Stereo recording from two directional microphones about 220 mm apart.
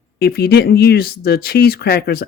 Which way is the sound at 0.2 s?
45° left (ahead or behind).